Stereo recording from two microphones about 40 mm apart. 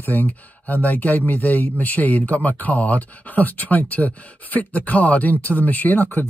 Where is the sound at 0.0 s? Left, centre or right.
Left.